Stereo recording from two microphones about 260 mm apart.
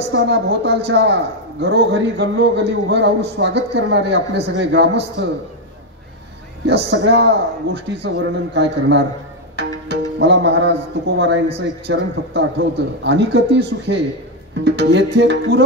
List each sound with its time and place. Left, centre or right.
0.1 s a man's voice: right
6.6 s a man's voice: right